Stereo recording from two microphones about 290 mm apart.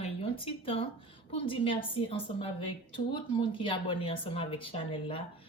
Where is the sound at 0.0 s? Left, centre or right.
Centre.